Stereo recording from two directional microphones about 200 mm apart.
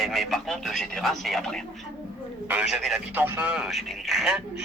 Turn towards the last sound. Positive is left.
turn(degrees=0)  # may be behind; listen again after turning